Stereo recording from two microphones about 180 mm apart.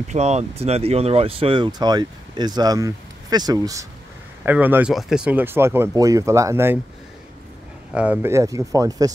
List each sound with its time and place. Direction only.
0.1 s speech: 35° right (ahead or behind); by 6.8 s 15° right (ahead or behind)
7.9 s speech: 10° right (ahead or behind)